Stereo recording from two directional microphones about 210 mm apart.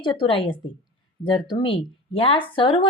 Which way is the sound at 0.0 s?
20° left (ahead or behind).